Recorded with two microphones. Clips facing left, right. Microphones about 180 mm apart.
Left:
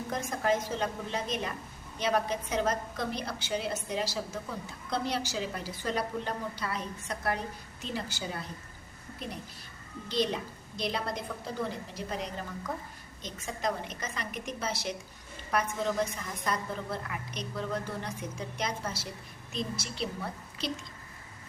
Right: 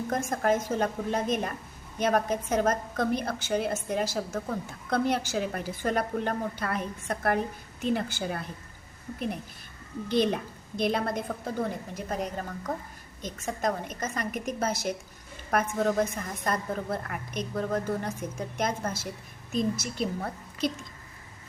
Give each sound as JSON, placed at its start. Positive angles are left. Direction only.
{"t": 0.1, "sound": "a woman's voice", "side_deg": -45}
{"t": 10.1, "sound": "a woman's voice", "side_deg": -55}